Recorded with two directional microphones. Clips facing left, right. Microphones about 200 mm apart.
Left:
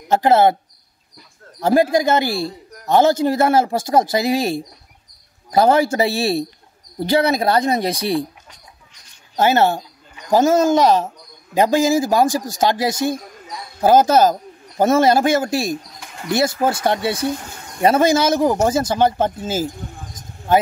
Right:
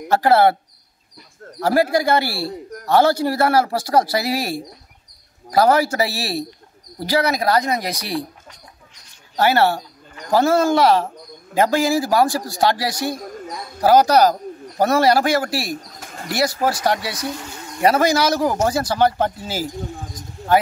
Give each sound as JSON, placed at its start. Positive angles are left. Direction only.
{"t": 0.1, "sound": "a man's voice", "side_deg": 20}
{"t": 1.6, "sound": "a man's voice", "side_deg": 20}
{"t": 9.4, "sound": "a man's voice", "side_deg": 20}
{"t": 15.7, "sound": "pigeon", "side_deg": -45}
{"t": 16.3, "sound": "a man's voice", "side_deg": 25}